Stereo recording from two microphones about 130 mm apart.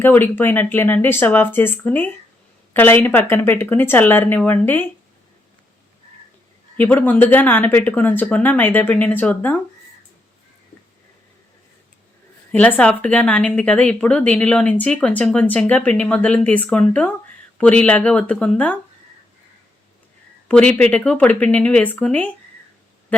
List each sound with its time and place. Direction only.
0.0 s a woman's voice: 15° left (ahead or behind)
6.7 s a woman's voice: 15° left (ahead or behind)
12.5 s a woman's voice: 10° left (ahead or behind)
20.5 s a woman's voice: 10° left (ahead or behind)